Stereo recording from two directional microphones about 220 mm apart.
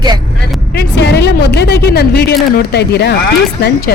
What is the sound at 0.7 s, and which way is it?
A woman's voice, 50° left (ahead or behind).